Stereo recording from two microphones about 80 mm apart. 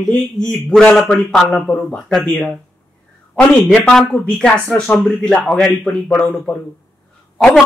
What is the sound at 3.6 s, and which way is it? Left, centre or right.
A man's voice, centre.